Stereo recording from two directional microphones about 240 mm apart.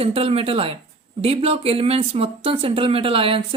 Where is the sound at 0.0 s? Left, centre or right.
Right.